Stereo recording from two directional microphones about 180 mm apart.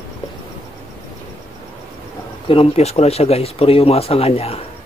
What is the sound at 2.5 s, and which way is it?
Speech, 35° left (ahead or behind).